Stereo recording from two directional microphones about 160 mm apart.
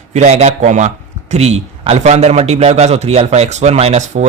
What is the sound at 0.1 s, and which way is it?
A man's voice, 45° right (ahead or behind).